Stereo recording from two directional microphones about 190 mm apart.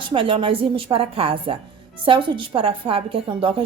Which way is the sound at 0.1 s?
30° right (ahead or behind).